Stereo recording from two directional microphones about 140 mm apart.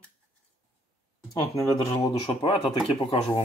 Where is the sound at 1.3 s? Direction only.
20° left (ahead or behind).